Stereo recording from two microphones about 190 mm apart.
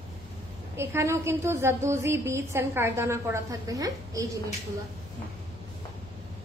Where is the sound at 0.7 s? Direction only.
15° right (ahead or behind).